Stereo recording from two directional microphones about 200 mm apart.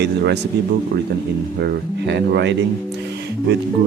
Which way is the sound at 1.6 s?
55° right (ahead or behind).